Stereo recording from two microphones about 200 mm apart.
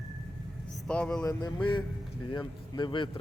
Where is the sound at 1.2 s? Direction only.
20° left (ahead or behind).